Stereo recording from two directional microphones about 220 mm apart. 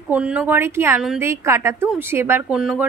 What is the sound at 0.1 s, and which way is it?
A woman's voice, 5° right (ahead or behind).